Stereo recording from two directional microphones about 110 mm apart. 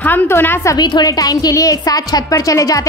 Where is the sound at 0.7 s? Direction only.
40° left (ahead or behind).